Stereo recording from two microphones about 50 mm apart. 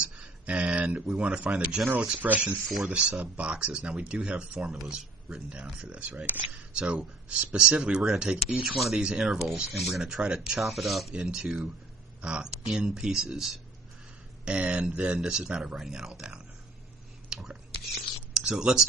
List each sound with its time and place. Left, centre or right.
0.0 s a sound: right
0.9 s speech: right
2.8 s speech: right
6.7 s speech: centre
8.6 s speech: centre
11.1 s speech: centre
14.4 s speech: right
17.2 s whispering: centre
18.3 s speech: centre